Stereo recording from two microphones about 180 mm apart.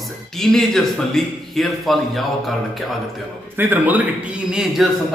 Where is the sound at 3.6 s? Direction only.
10° right (ahead or behind).